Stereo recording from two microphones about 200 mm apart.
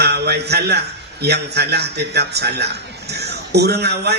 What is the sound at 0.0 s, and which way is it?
A man's voice, 55° right (ahead or behind).